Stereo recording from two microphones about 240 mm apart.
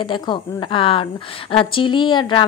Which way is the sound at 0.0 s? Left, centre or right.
Centre.